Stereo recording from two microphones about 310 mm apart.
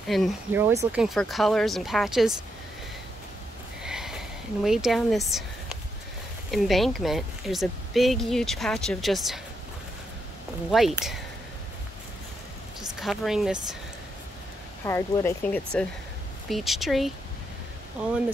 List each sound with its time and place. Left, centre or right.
0.1 s speech: centre
3.8 s a sound: centre
6.5 s speech: centre
10.7 s speech: centre
13.0 s speech: centre
14.9 s speech: centre